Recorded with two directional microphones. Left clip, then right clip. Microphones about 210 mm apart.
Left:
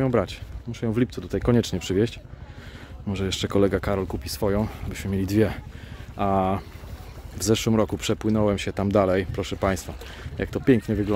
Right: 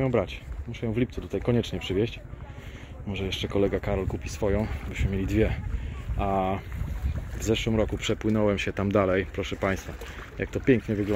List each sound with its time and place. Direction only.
0.0 s speech: 25° left (ahead or behind)
3.3 s speech: 30° left (ahead or behind)
8.3 s speech: 15° left (ahead or behind)